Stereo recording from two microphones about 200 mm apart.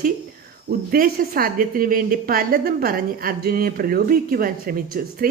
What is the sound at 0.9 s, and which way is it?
A woman's voice, 45° right (ahead or behind).